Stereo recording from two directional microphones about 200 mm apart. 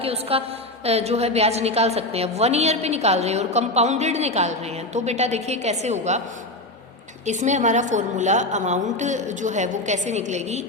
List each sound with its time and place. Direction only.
0.0 s a sound: 30° right (ahead or behind)
0.9 s a woman's voice: 30° right (ahead or behind)
7.3 s a woman's voice: 35° right (ahead or behind)